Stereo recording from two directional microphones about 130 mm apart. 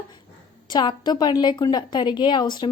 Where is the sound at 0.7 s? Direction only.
35° left (ahead or behind).